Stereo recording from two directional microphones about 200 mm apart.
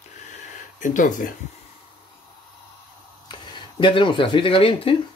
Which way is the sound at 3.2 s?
25° left (ahead or behind).